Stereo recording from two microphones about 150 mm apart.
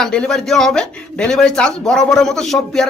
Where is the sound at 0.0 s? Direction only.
5° left (ahead or behind).